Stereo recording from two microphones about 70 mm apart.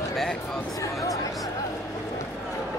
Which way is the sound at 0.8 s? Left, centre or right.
Left.